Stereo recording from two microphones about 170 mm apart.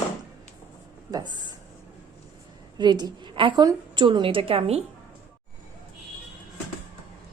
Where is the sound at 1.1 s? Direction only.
25° right (ahead or behind).